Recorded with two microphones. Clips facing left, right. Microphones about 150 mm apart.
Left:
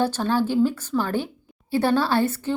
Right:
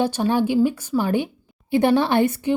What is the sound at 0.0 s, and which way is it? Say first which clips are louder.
Speech: right 2 dB; 15° right (ahead or behind).